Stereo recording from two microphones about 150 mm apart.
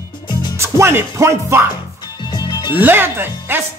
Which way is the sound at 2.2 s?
30° left (ahead or behind).